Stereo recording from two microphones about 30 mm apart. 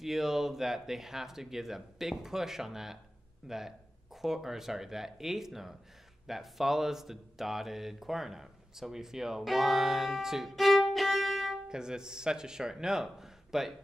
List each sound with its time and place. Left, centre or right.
0.0 s speech: centre
9.4 s music: centre
10.2 s speech: centre
10.5 s violin: centre
11.7 s speech: right